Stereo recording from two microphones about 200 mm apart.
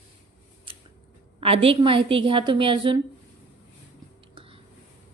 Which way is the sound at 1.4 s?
30° right (ahead or behind).